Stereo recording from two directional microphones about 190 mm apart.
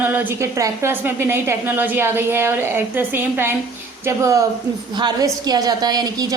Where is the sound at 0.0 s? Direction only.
10° right (ahead or behind).